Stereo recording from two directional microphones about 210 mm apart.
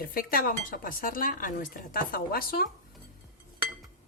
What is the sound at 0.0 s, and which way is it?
Speech, 45° left (ahead or behind).